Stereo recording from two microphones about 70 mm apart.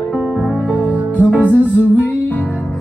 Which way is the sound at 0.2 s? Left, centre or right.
Centre.